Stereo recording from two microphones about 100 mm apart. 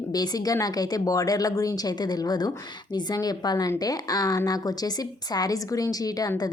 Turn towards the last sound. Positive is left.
turn(degrees=40)  # may be behind; listen again after turning